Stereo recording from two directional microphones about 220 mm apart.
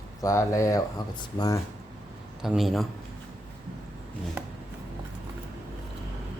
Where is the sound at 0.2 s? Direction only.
15° left (ahead or behind).